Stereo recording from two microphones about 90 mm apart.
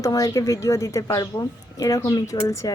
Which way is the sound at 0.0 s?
40° left (ahead or behind).